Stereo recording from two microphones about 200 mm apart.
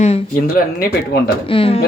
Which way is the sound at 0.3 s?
45° left (ahead or behind).